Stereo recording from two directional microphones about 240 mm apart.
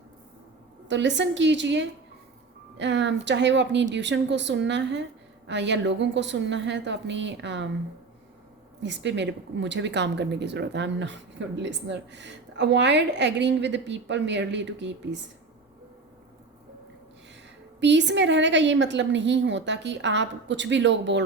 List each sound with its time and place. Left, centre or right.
0.9 s a woman's voice: right
8.8 s a woman's voice: right
17.7 s a woman's voice: right